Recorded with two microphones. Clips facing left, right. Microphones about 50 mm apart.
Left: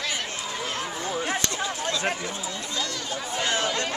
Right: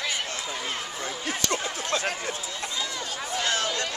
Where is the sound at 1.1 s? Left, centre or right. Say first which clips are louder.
Left 6 dB; left.